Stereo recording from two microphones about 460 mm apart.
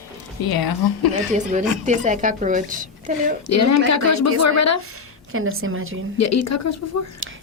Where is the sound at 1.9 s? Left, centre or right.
Centre.